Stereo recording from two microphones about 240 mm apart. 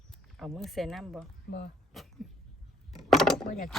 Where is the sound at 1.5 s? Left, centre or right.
Left.